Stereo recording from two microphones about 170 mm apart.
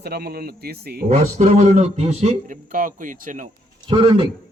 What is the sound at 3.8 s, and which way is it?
Speech, 30° right (ahead or behind).